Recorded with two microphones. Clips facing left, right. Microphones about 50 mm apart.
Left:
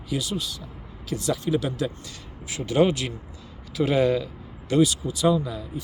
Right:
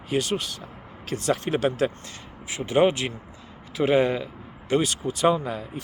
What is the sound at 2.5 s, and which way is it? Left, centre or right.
Speech, right.